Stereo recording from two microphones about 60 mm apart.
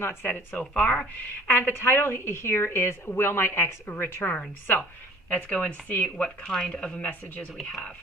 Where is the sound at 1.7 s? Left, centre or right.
Left.